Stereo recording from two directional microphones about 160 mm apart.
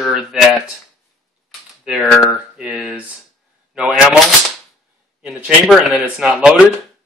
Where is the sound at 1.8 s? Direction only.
Centre (ahead or behind).